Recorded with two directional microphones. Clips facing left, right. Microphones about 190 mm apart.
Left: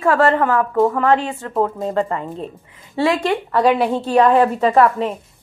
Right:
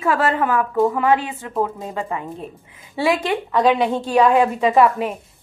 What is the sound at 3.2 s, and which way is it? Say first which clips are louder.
A woman's voice: left 1 dB; 5° left (ahead or behind).